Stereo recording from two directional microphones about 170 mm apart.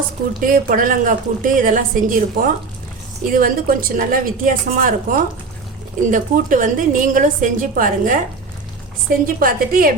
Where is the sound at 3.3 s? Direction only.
55° right (ahead or behind).